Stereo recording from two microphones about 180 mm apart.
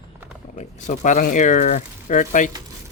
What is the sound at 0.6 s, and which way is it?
Speech, 45° left (ahead or behind).